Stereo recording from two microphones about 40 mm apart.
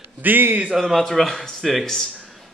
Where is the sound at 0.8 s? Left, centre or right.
Centre.